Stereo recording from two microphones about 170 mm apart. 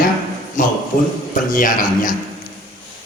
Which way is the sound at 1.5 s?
50° left (ahead or behind).